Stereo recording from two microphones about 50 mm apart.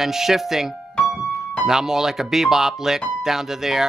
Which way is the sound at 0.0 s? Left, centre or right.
Centre.